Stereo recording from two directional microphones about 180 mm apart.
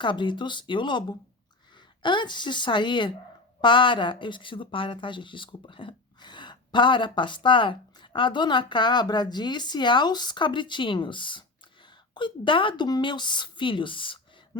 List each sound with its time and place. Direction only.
0.0 s speech: 25° left (ahead or behind)